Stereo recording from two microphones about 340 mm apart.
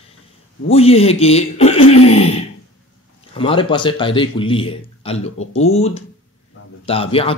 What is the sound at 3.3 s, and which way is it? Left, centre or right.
A man's voice, centre.